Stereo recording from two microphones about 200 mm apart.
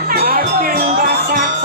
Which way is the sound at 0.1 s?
50° right (ahead or behind).